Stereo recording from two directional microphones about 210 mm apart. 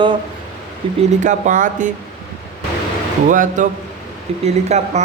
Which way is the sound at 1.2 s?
35° right (ahead or behind).